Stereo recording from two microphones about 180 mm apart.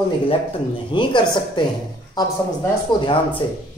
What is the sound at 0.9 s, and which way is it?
Speech, 30° left (ahead or behind).